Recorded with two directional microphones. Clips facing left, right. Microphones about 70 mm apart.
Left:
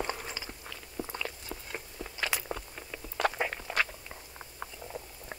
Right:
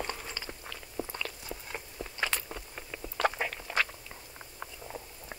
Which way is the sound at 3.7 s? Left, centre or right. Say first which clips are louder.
Right 1 dB; centre.